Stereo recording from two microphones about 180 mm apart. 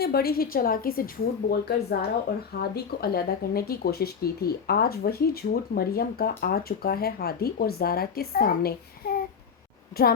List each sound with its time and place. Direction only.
0.0 s speech: 60° left (ahead or behind)